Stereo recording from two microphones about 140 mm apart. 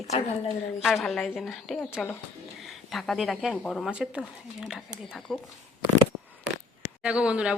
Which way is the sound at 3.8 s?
5° right (ahead or behind).